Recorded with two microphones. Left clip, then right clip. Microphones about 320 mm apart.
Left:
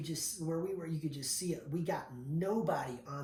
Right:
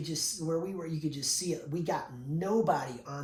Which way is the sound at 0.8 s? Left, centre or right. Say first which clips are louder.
Right 5 dB; centre.